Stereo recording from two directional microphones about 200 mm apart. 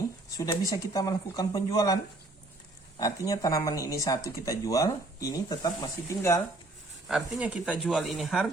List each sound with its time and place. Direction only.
0.3 s speech: 15° left (ahead or behind)
3.0 s speech: 15° left (ahead or behind)
7.1 s speech: 5° right (ahead or behind)